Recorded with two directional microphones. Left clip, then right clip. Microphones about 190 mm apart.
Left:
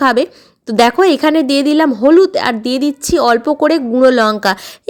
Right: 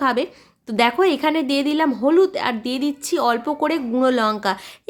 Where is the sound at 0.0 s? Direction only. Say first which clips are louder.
Left 8 dB; 35° left (ahead or behind).